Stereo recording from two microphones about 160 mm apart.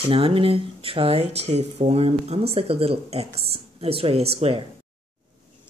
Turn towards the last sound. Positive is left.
turn(degrees=-40)  # may be behind; listen again after turning